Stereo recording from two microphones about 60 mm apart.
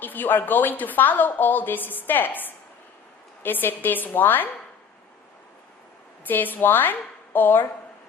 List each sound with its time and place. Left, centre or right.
0.0 s a woman's voice: left
6.2 s a woman's voice: left